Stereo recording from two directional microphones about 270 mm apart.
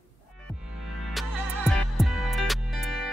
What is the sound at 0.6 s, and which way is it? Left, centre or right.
Music, centre.